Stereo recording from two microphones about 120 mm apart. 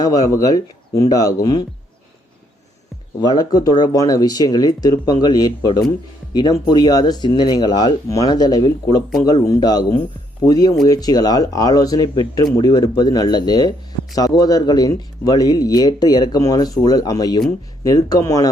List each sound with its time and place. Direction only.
0.0 s speech: 30° left (ahead or behind)
3.2 s speech: 35° left (ahead or behind)